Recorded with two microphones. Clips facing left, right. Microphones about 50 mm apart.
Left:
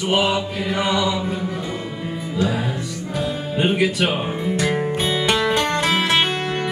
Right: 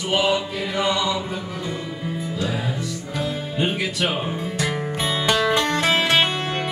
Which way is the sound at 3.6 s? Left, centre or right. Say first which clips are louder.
Left 5 dB; centre.